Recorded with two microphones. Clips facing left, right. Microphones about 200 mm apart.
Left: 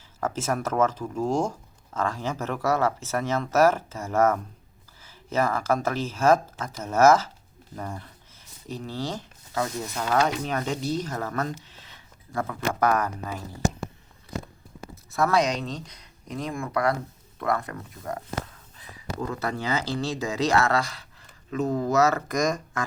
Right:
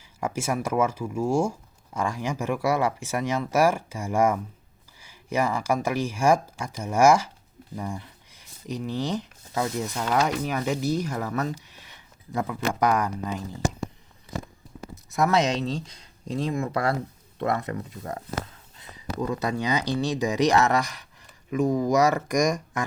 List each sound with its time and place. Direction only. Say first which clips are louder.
0.2 s speech: even; 10° right (ahead or behind)
7.8 s a sound: right 2 dB; 10° right (ahead or behind)
10.2 s speech: left 1 dB; 10° right (ahead or behind)
15.1 s speech: right 1 dB; 20° right (ahead or behind)